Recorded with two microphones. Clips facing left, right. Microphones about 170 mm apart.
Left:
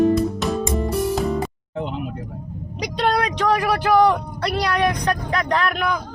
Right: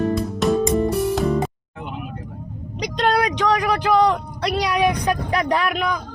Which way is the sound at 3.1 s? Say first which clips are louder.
Right 1 dB; centre (ahead or behind).